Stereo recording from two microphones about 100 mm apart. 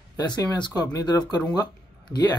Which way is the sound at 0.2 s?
40° left (ahead or behind).